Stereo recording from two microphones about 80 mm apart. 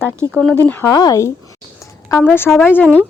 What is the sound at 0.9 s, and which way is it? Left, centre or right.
Speech, left.